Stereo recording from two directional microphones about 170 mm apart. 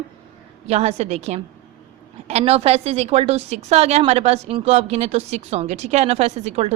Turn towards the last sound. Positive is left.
turn(degrees=-40)  # may be behind; listen again after turning